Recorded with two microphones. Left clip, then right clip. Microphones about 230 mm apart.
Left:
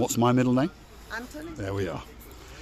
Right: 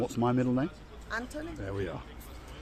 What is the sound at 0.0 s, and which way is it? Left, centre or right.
Speech, left.